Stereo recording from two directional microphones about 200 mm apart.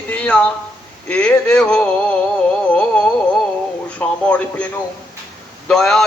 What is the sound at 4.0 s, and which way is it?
Speech, 5° left (ahead or behind).